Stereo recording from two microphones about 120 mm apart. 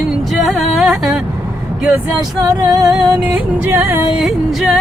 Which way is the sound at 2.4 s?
30° right (ahead or behind).